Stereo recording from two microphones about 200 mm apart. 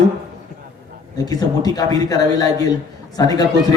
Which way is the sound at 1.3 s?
20° left (ahead or behind).